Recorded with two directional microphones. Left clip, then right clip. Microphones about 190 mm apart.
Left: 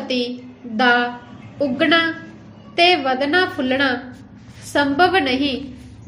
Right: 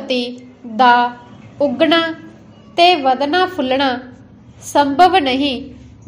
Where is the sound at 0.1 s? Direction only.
40° right (ahead or behind).